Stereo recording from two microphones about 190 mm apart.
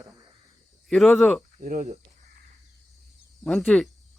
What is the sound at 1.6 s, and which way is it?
Speech, 40° right (ahead or behind).